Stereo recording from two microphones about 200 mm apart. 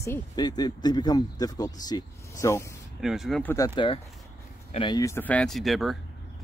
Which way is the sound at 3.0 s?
Centre (ahead or behind).